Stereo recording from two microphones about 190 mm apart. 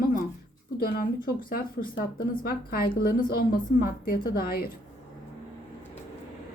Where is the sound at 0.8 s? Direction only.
50° left (ahead or behind).